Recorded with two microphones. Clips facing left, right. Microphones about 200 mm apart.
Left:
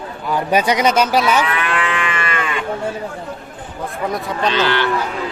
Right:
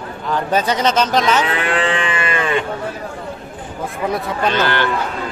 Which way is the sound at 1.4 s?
30° right (ahead or behind).